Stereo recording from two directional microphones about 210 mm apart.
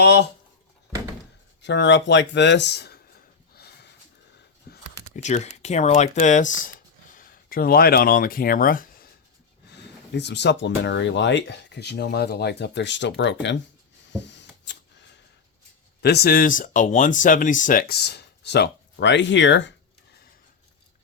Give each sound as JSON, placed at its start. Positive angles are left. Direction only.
{"t": 1.6, "sound": "speech", "side_deg": 55}
{"t": 3.5, "sound": "a sound", "side_deg": 50}
{"t": 5.1, "sound": "speech", "side_deg": 35}
{"t": 10.2, "sound": "speech", "side_deg": 55}
{"t": 14.1, "sound": "a sound", "side_deg": 55}
{"t": 16.0, "sound": "speech", "side_deg": 50}